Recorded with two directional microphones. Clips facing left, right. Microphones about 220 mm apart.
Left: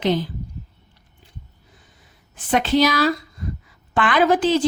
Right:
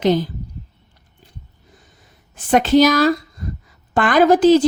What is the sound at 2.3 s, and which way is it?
A woman's voice, 45° right (ahead or behind).